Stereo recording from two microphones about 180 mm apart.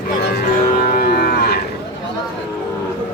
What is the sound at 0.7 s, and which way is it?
Moo, 50° left (ahead or behind).